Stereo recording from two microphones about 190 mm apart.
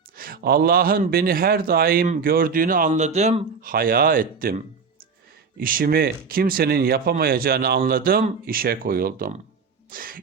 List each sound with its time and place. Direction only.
0.2 s a man's voice: 50° right (ahead or behind)
9.9 s sneeze: 50° right (ahead or behind)